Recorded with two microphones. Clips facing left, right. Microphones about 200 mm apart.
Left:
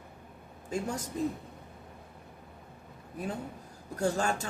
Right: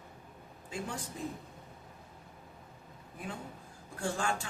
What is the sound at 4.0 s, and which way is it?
Speech, 40° left (ahead or behind).